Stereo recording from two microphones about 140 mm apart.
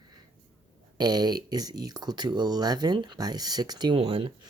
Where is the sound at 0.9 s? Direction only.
30° right (ahead or behind).